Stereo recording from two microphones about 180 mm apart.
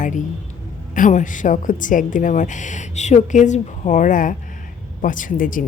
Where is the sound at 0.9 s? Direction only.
45° left (ahead or behind).